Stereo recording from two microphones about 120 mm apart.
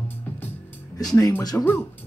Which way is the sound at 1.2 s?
25° left (ahead or behind).